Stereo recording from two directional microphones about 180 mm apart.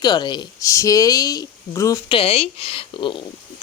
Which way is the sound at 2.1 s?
35° left (ahead or behind).